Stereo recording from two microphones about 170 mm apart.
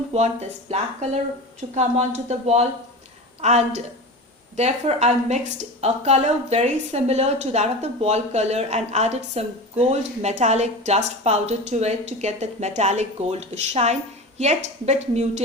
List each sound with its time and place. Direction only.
0.1 s a woman's voice: 40° right (ahead or behind)